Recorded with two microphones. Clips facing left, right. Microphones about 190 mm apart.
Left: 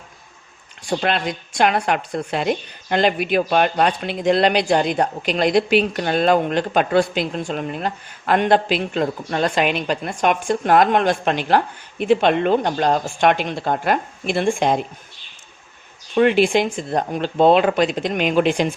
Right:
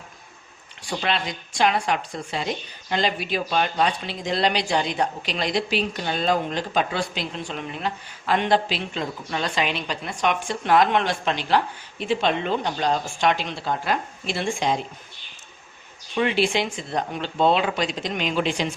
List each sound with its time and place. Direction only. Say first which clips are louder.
0.8 s speech: left 5 dB; 50° left (ahead or behind)
16.1 s speech: left 7 dB; 50° left (ahead or behind)